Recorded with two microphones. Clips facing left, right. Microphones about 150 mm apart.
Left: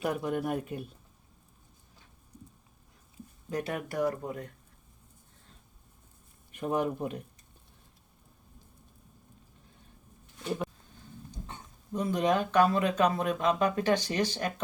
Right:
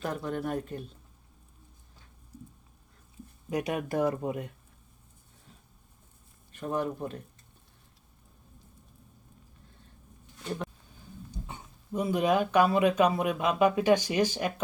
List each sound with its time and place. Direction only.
0.0 s speech: 10° left (ahead or behind)
3.5 s speech: 15° right (ahead or behind)
6.5 s speech: 15° left (ahead or behind)
11.3 s speech: 10° right (ahead or behind)